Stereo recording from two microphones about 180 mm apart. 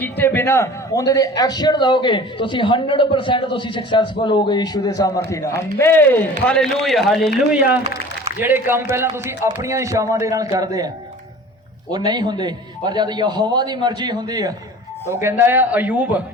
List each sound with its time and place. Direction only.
0.0 s a man's voice: 10° left (ahead or behind)
8.4 s a man's voice: 10° right (ahead or behind)